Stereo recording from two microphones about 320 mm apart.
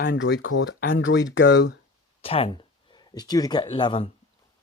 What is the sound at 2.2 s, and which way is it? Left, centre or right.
Speech, centre.